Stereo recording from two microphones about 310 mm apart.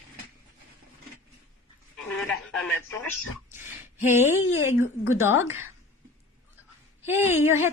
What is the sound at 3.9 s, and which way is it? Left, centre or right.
Speech, centre.